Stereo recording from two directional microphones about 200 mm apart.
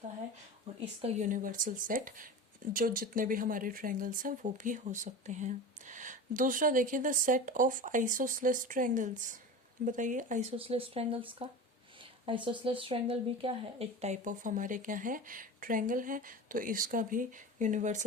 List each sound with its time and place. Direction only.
1.0 s speech: 40° right (ahead or behind)